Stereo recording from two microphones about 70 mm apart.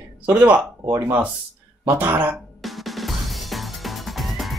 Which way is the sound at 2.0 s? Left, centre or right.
Right.